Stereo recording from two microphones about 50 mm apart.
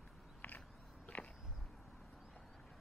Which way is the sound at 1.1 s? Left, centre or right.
Left.